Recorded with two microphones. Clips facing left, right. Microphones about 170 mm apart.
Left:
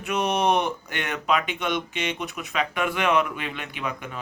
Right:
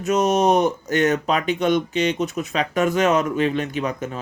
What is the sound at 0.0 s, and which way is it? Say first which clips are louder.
Speech: right 6 dB; 40° right (ahead or behind).